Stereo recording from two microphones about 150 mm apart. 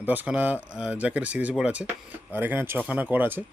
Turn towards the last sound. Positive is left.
turn(degrees=-15)  # may be behind; listen again after turning